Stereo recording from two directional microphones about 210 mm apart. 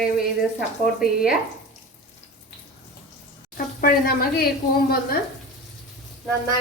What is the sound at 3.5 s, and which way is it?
Speech, 45° left (ahead or behind).